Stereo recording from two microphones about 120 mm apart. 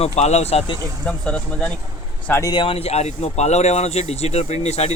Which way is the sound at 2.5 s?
45° left (ahead or behind).